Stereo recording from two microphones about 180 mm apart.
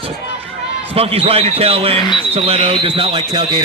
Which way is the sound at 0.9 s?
30° right (ahead or behind).